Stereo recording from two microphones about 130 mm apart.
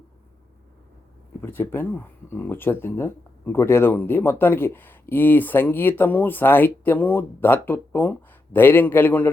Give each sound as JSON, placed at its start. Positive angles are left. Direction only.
{"t": 1.4, "sound": "speech", "side_deg": 15}